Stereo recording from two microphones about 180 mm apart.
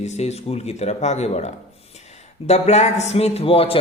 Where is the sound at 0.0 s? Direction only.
40° left (ahead or behind).